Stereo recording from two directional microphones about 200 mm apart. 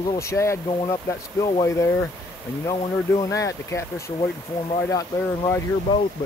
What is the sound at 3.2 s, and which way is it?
Speech, 15° left (ahead or behind).